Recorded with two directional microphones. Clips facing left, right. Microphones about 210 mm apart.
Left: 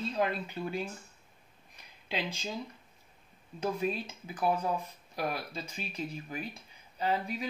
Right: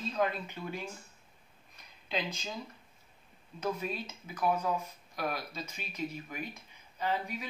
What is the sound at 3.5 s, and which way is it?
Speech, 30° left (ahead or behind).